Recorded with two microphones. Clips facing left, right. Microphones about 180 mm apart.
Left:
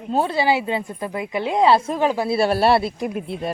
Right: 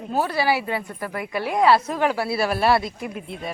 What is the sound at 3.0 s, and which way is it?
Speech, 45° left (ahead or behind).